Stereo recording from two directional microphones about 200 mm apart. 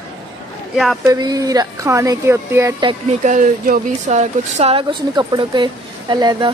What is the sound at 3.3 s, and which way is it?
Speech, 40° right (ahead or behind).